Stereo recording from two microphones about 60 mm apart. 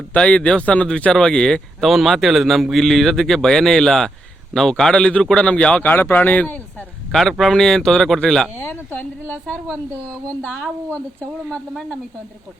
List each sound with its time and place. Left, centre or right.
0.1 s a man's voice: left
1.8 s a man's voice: centre
5.8 s speech: left
7.1 s a man's voice: centre
8.6 s speech: left